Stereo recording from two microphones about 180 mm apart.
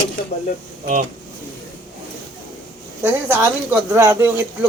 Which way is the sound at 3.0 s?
15° right (ahead or behind).